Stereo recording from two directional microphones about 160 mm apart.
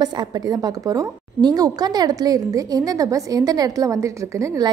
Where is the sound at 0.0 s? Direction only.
25° right (ahead or behind).